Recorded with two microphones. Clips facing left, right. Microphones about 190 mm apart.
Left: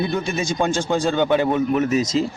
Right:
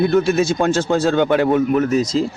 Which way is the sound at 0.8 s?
10° left (ahead or behind).